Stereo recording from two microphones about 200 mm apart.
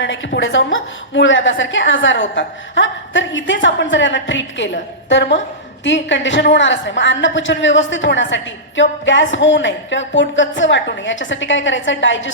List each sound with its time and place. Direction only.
0.3 s a woman's voice: 70° left (ahead or behind)